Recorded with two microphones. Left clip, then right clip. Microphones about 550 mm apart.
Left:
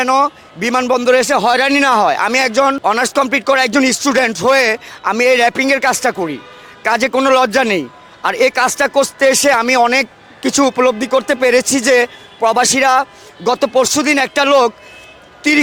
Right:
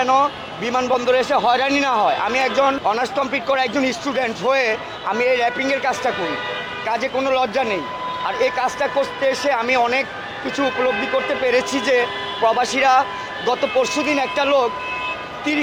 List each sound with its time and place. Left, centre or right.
0.0 s a man's voice: left